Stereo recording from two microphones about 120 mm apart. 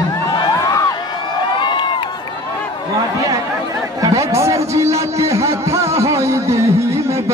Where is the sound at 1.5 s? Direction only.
40° left (ahead or behind).